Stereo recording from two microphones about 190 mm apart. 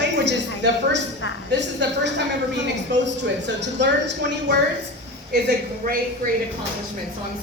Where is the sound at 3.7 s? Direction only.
65° right (ahead or behind).